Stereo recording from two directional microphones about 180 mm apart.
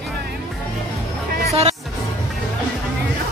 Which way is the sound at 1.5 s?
40° right (ahead or behind).